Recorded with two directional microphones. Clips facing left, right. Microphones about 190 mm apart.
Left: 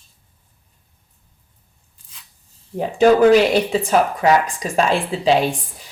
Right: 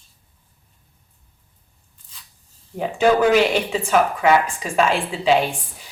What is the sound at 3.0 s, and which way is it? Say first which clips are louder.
Speech: left 4 dB; 35° left (ahead or behind).